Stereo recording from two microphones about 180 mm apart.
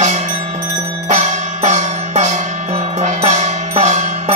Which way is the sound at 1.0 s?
40° right (ahead or behind).